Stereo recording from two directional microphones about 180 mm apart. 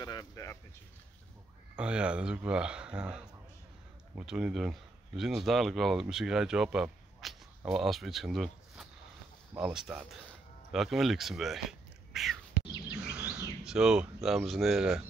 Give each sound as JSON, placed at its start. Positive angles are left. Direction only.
{"t": 0.0, "sound": "a sound", "side_deg": 20}
{"t": 1.8, "sound": "speech", "side_deg": -5}
{"t": 12.1, "sound": "whispering", "side_deg": 0}
{"t": 13.1, "sound": "bird vocalization", "side_deg": -5}
{"t": 13.7, "sound": "speech", "side_deg": -5}